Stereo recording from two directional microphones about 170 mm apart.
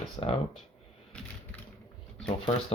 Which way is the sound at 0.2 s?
25° left (ahead or behind).